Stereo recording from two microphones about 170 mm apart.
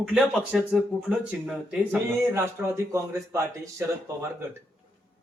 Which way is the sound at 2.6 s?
15° right (ahead or behind).